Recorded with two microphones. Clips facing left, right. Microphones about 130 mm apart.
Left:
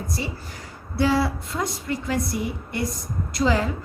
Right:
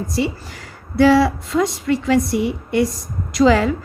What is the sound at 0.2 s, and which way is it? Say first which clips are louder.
A woman's voice: right 10 dB; 90° right.